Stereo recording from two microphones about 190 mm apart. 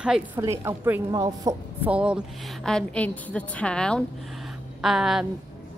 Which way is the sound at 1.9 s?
5° right (ahead or behind).